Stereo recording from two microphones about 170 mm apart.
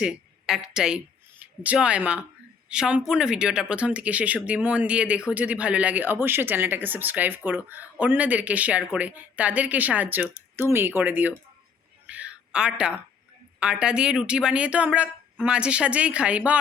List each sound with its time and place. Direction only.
0.0 s a woman's voice: 5° right (ahead or behind)
12.0 s a sound: 10° right (ahead or behind)
13.6 s speech: 5° right (ahead or behind)